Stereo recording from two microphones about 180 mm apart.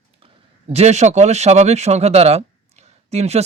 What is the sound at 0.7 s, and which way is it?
Speech, 35° right (ahead or behind).